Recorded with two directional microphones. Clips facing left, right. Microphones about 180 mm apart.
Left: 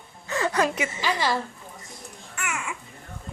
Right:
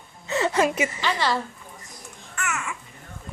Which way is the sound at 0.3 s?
20° right (ahead or behind).